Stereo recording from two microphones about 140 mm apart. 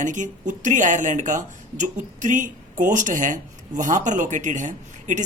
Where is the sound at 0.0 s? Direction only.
65° right (ahead or behind).